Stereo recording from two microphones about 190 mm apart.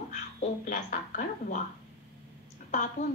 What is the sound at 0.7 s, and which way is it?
Speech, 40° left (ahead or behind).